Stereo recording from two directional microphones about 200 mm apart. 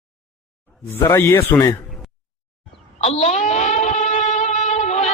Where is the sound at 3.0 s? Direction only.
30° left (ahead or behind).